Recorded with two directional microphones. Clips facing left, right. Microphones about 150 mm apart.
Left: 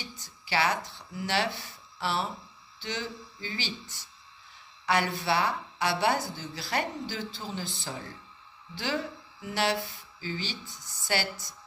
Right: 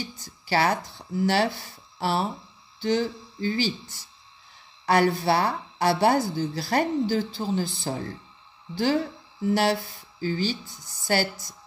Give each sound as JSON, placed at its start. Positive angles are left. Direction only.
{"t": 0.2, "sound": "a woman's voice", "side_deg": -40}